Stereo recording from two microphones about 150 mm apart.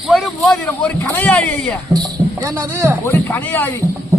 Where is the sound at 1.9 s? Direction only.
25° right (ahead or behind).